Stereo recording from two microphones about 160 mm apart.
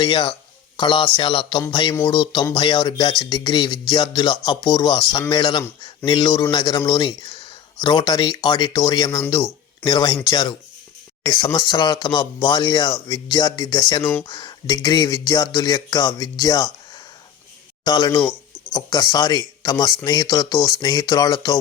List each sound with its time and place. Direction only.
0.0 s speech: 35° left (ahead or behind)